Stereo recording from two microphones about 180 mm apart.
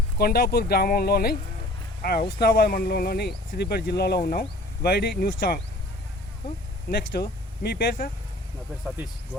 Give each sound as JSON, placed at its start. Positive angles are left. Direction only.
{"t": 0.2, "sound": "speech", "side_deg": 60}
{"t": 7.2, "sound": "speech", "side_deg": 60}